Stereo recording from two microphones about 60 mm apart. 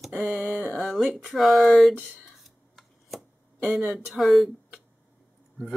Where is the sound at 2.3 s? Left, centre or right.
Centre.